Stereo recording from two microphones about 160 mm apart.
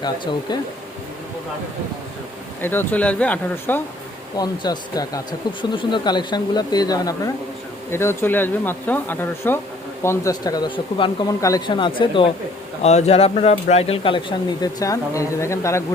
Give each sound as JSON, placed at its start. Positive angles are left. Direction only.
{"t": 0.0, "sound": "speech", "side_deg": 25}
{"t": 2.6, "sound": "speech", "side_deg": 15}
{"t": 4.4, "sound": "speech", "side_deg": 25}
{"t": 12.8, "sound": "speech", "side_deg": 45}